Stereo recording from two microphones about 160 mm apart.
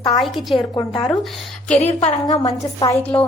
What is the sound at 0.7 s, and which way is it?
Speech, 30° left (ahead or behind).